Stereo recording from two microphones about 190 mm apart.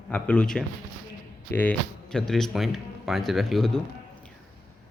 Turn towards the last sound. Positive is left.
turn(degrees=0)  # may be behind; listen again after turning